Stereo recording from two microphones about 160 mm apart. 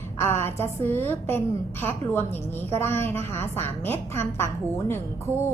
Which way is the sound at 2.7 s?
15° left (ahead or behind).